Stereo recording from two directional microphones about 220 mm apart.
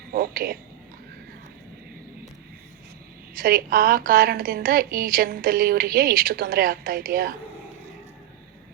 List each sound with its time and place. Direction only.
0.1 s speech: 40° right (ahead or behind)
3.3 s a woman's voice: 40° right (ahead or behind)